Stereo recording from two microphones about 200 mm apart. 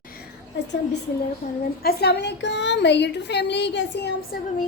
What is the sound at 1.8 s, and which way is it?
A woman's voice, 50° left (ahead or behind).